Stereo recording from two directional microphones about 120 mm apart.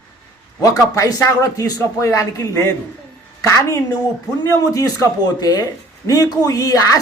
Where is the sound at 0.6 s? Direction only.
30° left (ahead or behind).